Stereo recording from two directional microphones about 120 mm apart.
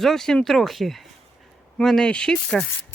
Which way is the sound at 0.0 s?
5° left (ahead or behind).